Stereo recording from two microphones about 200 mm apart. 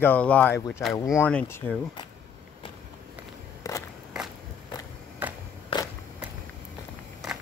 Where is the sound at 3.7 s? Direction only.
15° left (ahead or behind).